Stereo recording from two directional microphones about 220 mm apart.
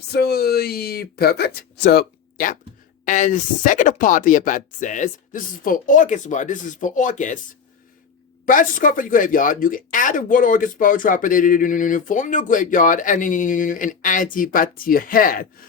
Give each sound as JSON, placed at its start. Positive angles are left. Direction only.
{"t": 0.1, "sound": "speech", "side_deg": 45}
{"t": 8.4, "sound": "speech", "side_deg": 40}